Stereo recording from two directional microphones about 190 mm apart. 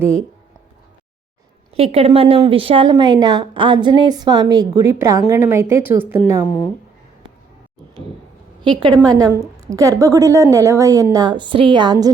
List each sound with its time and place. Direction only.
0.0 s a woman's voice: 15° right (ahead or behind)
1.7 s a woman's voice: 30° right (ahead or behind); by 6.6 s 10° right (ahead or behind)
8.6 s a woman's voice: 25° right (ahead or behind)